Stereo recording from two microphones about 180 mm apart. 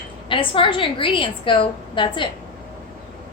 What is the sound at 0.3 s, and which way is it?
A woman's voice, 30° left (ahead or behind).